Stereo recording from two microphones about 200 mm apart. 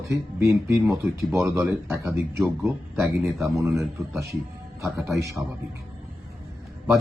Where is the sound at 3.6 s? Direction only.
15° right (ahead or behind).